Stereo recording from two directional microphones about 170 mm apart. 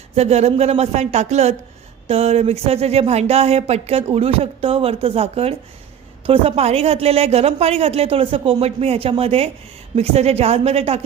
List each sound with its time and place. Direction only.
0.2 s speech: 40° right (ahead or behind)